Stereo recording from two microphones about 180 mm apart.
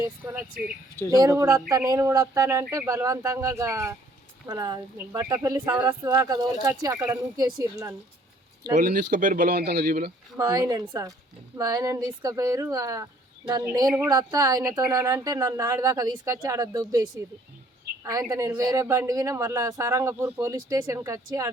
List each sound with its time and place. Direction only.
0.0 s speech: 15° right (ahead or behind)
8.7 s speech: 50° right (ahead or behind)
10.3 s speech: 20° right (ahead or behind)
18.0 s speech: 15° right (ahead or behind)